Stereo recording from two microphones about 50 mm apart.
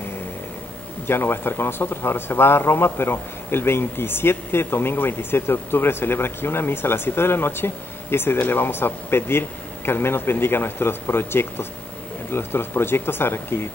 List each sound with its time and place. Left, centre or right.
1.0 s a man's voice: left